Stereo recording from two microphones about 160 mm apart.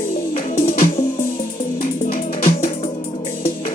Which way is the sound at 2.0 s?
60° left (ahead or behind).